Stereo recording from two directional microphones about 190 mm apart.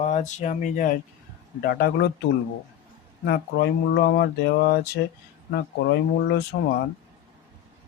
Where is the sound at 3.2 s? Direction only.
55° left (ahead or behind).